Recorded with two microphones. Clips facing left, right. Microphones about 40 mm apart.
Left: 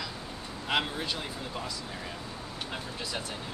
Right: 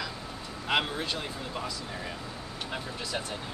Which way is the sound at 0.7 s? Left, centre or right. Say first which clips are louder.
Right 2 dB; centre.